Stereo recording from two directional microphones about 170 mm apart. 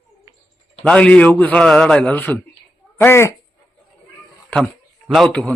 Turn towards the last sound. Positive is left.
turn(degrees=10)  # may be behind; listen again after turning